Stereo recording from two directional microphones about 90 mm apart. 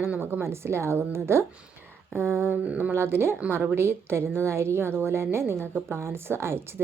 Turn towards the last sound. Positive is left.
turn(degrees=-30)  # may be behind; listen again after turning